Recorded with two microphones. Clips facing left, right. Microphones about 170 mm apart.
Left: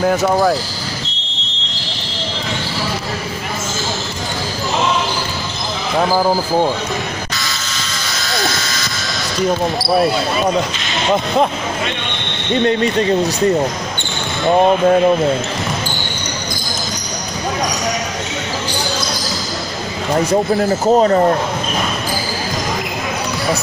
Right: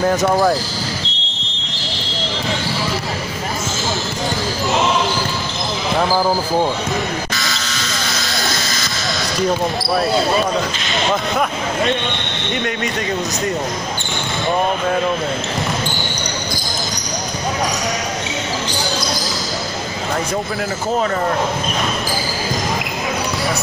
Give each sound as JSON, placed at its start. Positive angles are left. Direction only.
{"t": 0.0, "sound": "speech", "side_deg": 0}
{"t": 8.1, "sound": "music", "side_deg": 0}
{"t": 12.6, "sound": "speech", "side_deg": 30}
{"t": 20.5, "sound": "speech", "side_deg": 35}